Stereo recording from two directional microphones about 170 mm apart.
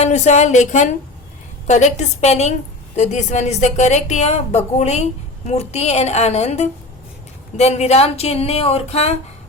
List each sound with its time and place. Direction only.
0.0 s a woman's voice: 40° left (ahead or behind)